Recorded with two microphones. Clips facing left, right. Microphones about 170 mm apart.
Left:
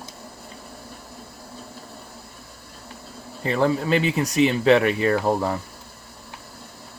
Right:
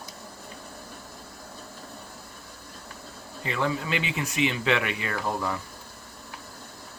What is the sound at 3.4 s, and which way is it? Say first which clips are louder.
Speech: left 7 dB; 40° left (ahead or behind).